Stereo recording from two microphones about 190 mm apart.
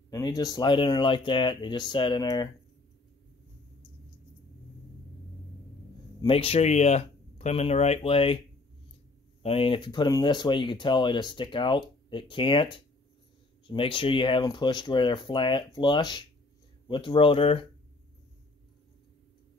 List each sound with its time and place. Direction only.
0.1 s speech: 20° left (ahead or behind)
6.2 s speech: 30° left (ahead or behind)
9.4 s speech: 30° left (ahead or behind)